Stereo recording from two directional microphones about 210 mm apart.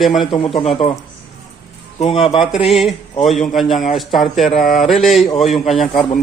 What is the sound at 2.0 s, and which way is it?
Speech, 25° left (ahead or behind).